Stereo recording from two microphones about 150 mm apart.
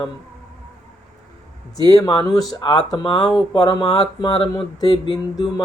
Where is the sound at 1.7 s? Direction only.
25° left (ahead or behind).